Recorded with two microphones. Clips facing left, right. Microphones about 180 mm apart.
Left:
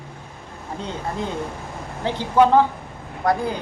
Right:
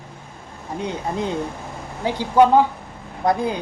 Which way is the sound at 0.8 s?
15° right (ahead or behind).